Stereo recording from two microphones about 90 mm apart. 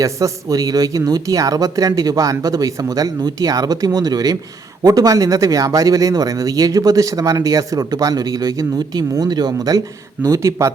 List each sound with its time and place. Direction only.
0.0 s speech: 40° right (ahead or behind)
10.2 s speech: 35° right (ahead or behind)